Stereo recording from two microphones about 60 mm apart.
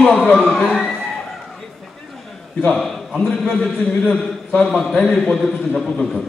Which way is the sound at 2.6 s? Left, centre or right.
Centre.